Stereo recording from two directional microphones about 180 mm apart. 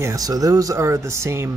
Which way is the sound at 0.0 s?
20° right (ahead or behind).